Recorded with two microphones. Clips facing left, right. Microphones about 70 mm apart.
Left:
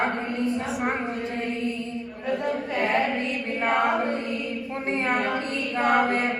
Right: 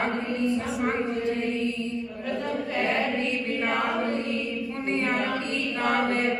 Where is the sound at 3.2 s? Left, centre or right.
Left.